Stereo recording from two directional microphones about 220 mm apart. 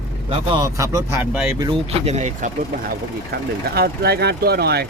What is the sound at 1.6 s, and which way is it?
Speech, 25° right (ahead or behind).